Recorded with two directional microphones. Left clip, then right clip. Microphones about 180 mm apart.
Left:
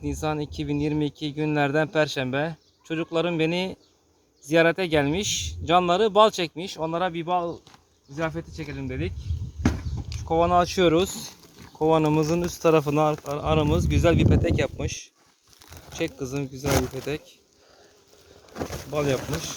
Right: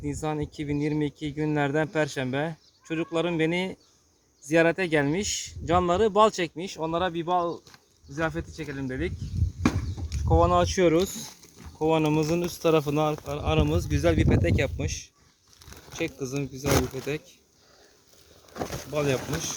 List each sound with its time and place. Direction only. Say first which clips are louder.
0.1 s a man's voice: left 3 dB; 20° left (ahead or behind)
10.2 s a man's voice: left 1 dB; 15° left (ahead or behind)
18.9 s a man's voice: left 2 dB; 20° left (ahead or behind)